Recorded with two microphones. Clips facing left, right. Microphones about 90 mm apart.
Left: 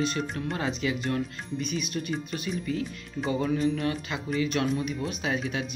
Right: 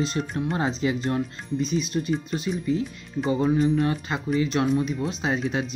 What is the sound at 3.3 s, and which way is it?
Music, 35° right (ahead or behind).